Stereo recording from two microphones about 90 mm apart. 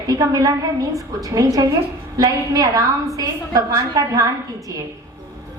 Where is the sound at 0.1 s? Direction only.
40° right (ahead or behind).